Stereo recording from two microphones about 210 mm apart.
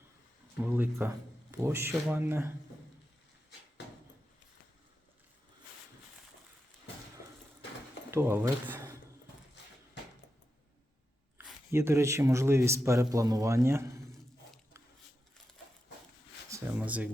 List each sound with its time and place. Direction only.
0.6 s speech: 10° right (ahead or behind)
8.1 s speech: 10° right (ahead or behind)
11.3 s speech: 10° right (ahead or behind)
16.5 s a sound: 5° right (ahead or behind)